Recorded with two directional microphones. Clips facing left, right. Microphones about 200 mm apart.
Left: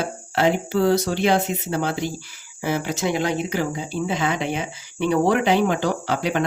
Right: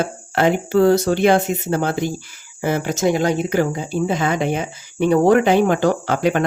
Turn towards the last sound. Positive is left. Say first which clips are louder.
# right 4 dB
turn(degrees=-50)  # may be behind; listen again after turning